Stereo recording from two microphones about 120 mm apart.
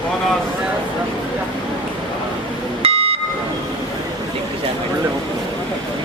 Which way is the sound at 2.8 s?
55° right (ahead or behind).